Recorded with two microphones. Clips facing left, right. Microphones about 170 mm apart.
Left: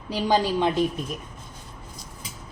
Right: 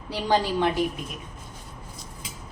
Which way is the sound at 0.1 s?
15° left (ahead or behind).